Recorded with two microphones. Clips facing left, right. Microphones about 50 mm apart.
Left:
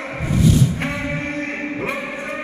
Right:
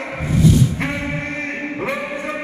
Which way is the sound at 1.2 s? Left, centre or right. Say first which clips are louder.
Even; right.